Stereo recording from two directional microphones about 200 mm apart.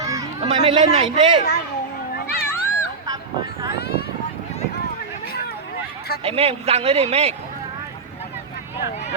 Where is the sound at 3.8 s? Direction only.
55° left (ahead or behind).